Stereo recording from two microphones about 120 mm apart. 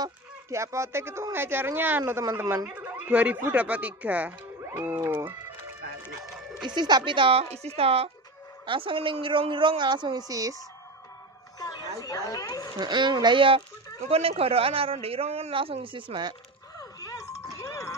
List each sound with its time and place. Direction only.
0.0 s speech: 25° right (ahead or behind)
6.7 s a man's voice: 40° right (ahead or behind)
11.6 s speech: 30° left (ahead or behind)
12.7 s speech: 40° right (ahead or behind)
14.0 s a man's voice: 60° right (ahead or behind); by 16.3 s 40° right (ahead or behind)
16.7 s a sound: 30° left (ahead or behind)